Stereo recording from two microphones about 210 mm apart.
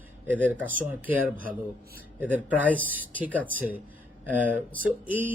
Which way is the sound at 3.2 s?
10° right (ahead or behind).